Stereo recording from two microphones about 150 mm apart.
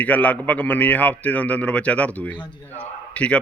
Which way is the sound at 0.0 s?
10° left (ahead or behind).